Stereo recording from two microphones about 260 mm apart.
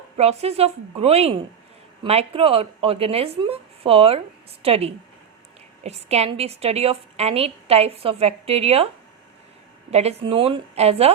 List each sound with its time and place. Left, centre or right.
0.2 s a woman's voice: right
9.9 s a woman's voice: right